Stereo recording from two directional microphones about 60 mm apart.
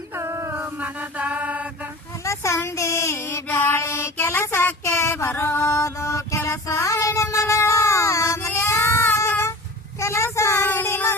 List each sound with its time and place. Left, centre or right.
0.1 s music: right
0.5 s mantra: right
2.2 s a child's voice: left
2.6 s a sound: left
4.8 s child singing: left
5.2 s mantra: left
6.7 s child singing: left
8.4 s child singing: left
10.0 s child singing: left
10.7 s child singing: left